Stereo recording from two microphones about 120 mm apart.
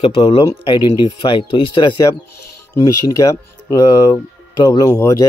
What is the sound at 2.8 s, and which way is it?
Speech, 30° left (ahead or behind).